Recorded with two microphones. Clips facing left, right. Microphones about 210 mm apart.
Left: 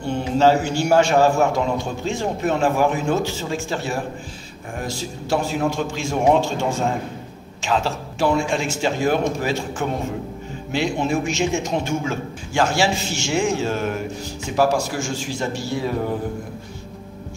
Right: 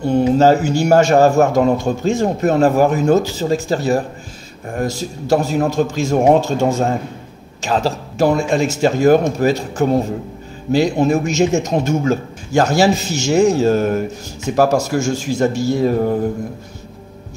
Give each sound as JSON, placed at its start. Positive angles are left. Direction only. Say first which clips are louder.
{"t": 0.0, "sound": "a man's voice", "louder": "right 5 dB", "side_deg": -40}